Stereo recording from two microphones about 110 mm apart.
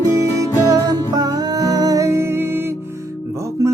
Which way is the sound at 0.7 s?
35° right (ahead or behind).